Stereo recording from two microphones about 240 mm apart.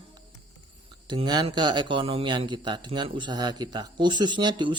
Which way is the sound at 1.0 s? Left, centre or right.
Centre.